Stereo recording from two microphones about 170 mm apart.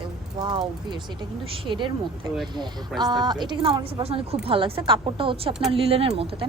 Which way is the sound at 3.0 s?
25° right (ahead or behind).